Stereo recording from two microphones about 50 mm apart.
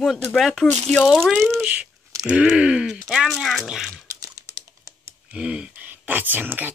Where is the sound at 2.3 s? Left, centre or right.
Centre.